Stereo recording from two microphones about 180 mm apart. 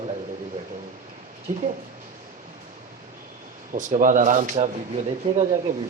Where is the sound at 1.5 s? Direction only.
35° right (ahead or behind).